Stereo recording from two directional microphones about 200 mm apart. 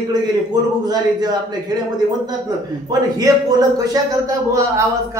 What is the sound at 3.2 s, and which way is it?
Speech, 20° right (ahead or behind).